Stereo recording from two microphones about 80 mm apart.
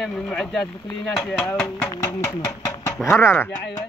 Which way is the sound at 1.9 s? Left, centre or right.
Left.